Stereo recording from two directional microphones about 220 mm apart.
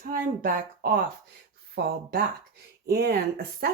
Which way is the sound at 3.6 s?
45° right (ahead or behind).